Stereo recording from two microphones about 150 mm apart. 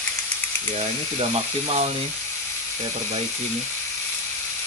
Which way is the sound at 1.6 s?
45° right (ahead or behind).